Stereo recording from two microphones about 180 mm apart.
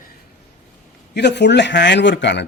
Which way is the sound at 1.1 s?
70° left (ahead or behind).